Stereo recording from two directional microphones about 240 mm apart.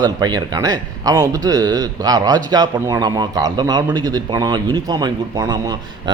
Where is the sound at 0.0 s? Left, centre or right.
Centre.